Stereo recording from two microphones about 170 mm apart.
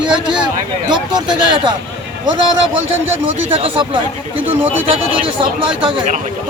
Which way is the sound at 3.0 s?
15° right (ahead or behind).